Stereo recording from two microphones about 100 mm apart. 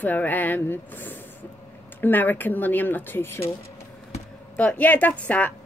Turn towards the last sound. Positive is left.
turn(degrees=15)  # may be behind; listen again after turning